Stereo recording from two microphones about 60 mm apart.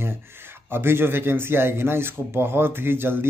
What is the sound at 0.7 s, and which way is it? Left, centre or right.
A man's voice, right.